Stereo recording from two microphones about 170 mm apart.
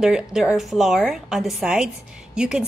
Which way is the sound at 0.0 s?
5° right (ahead or behind).